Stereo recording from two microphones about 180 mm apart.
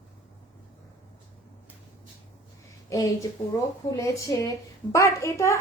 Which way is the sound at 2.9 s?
20° left (ahead or behind).